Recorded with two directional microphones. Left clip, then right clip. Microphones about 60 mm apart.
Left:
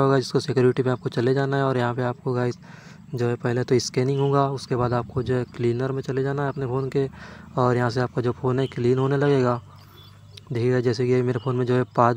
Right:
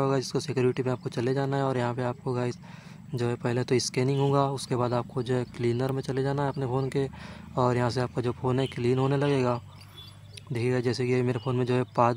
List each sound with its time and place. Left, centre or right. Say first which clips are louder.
0.0 s speech: left 7 dB; left
3.2 s speech: left 5 dB; left